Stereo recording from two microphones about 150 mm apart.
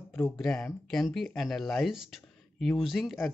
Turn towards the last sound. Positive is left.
turn(degrees=0)  # may be behind; listen again after turning